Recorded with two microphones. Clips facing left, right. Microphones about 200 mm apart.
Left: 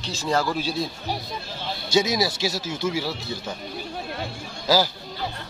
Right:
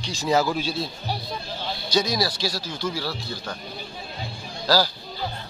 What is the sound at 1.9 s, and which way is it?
Speech, 25° left (ahead or behind).